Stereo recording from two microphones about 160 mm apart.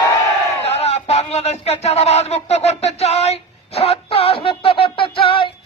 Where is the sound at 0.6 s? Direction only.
40° left (ahead or behind).